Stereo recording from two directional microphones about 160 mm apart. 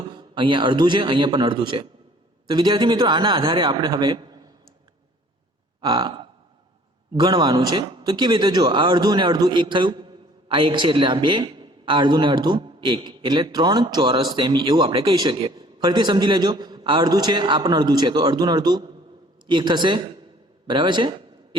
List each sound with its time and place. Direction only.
0.1 s speech: 30° right (ahead or behind)
5.8 s speech: 30° right (ahead or behind)